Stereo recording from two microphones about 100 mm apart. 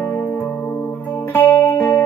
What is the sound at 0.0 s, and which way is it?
Music, 20° left (ahead or behind).